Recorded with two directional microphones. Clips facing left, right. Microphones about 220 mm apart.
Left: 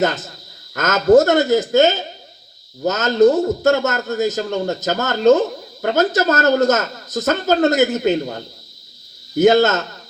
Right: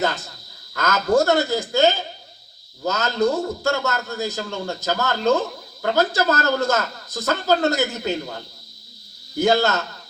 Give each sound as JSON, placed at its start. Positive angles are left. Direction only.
{"t": 0.0, "sound": "speech", "side_deg": 20}
{"t": 9.3, "sound": "speech", "side_deg": 20}